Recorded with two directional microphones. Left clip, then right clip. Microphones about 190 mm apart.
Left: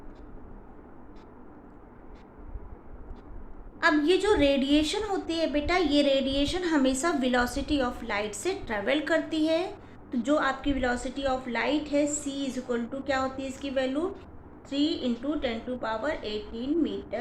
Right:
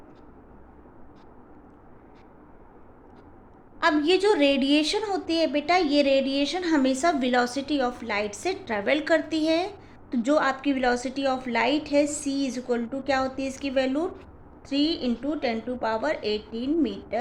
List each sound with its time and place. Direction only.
3.8 s a woman's voice: 35° right (ahead or behind)